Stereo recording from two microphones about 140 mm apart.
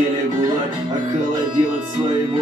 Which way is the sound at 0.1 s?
30° right (ahead or behind).